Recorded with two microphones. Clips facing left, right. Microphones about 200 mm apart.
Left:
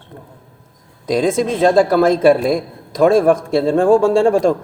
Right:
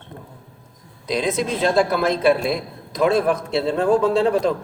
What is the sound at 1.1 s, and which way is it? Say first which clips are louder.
A man's voice: left 6 dB; 45° left (ahead or behind).